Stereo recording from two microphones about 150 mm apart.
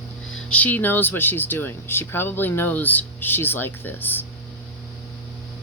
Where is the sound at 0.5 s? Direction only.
10° left (ahead or behind).